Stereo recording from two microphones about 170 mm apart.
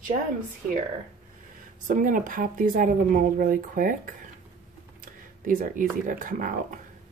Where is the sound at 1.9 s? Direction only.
50° right (ahead or behind).